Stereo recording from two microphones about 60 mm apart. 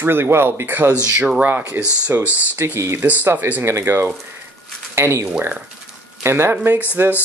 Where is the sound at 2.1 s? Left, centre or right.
Right.